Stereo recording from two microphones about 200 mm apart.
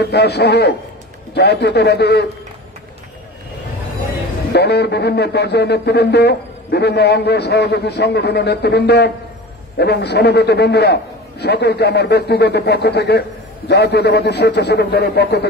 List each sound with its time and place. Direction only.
0.0 s speech: 55° left (ahead or behind)
4.5 s speech: 55° left (ahead or behind)